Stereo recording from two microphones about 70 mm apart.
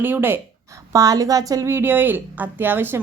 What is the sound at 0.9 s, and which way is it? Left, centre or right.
Speech, right.